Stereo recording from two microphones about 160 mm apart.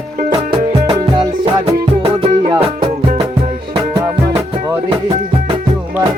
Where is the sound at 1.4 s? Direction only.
30° right (ahead or behind).